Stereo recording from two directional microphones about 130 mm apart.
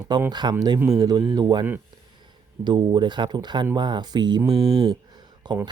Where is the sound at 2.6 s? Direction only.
35° right (ahead or behind).